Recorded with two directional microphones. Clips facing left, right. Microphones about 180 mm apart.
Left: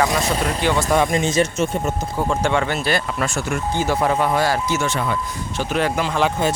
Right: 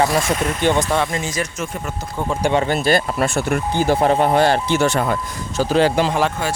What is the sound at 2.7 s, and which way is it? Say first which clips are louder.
Speech: right 4 dB; 45° right (ahead or behind).